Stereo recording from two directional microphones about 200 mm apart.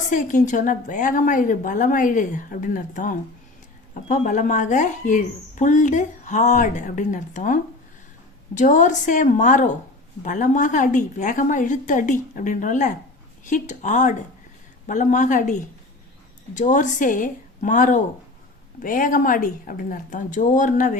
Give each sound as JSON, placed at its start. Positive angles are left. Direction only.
{"t": 0.1, "sound": "speech", "side_deg": 40}